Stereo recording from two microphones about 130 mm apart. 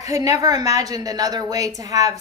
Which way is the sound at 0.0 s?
25° right (ahead or behind).